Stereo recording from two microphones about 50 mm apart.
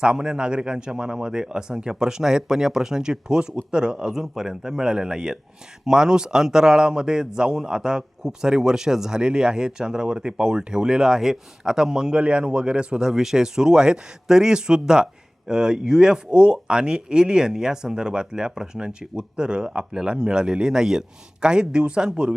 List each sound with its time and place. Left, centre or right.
0.0 s a man's voice: centre